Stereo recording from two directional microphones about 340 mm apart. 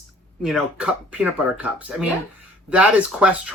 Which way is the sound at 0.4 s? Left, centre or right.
Centre.